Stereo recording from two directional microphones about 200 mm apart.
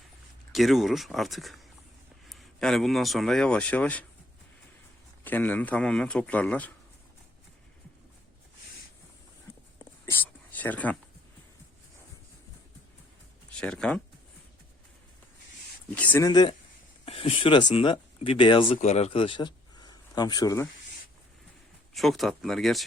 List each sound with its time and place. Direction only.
0.5 s speech: centre (ahead or behind)
5.2 s a man's voice: 10° left (ahead or behind)
9.7 s whispering: 10° left (ahead or behind)
13.6 s speech: 5° left (ahead or behind)
15.9 s a man's voice: 5° left (ahead or behind)
16.3 s speech: 25° left (ahead or behind)
21.9 s speech: centre (ahead or behind)